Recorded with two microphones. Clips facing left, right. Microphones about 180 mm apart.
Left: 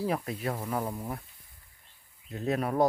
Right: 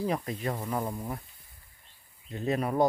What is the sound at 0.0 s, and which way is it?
Speech, 5° left (ahead or behind).